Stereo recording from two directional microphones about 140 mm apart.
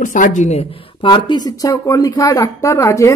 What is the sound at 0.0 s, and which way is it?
Speech, 65° left (ahead or behind).